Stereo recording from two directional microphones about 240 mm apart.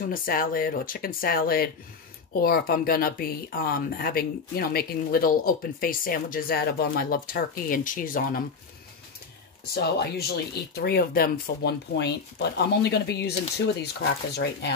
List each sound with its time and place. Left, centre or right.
0.0 s speech: left
9.8 s speech: left
14.3 s speech: left